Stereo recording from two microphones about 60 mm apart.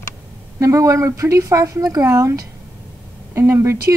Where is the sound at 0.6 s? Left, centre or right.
Right.